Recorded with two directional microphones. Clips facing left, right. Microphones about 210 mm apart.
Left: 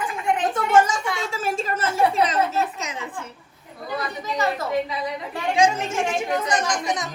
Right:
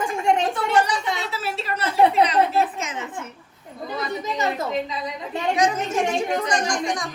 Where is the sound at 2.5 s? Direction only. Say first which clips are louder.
Right 3 dB; 35° left (ahead or behind).